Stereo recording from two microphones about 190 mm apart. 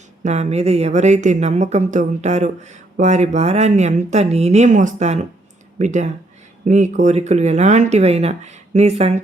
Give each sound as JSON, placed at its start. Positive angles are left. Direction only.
{"t": 0.2, "sound": "a woman's voice", "side_deg": -40}